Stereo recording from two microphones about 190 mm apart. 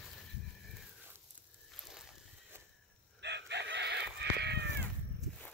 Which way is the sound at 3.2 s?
65° right (ahead or behind).